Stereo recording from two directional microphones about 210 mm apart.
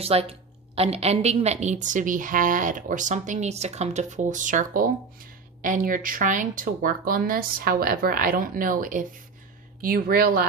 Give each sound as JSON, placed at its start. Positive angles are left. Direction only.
{"t": 0.0, "sound": "a woman's voice", "side_deg": -30}